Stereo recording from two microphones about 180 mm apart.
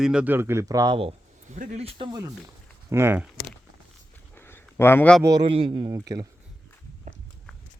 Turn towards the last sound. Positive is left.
turn(degrees=-20)  # may be behind; listen again after turning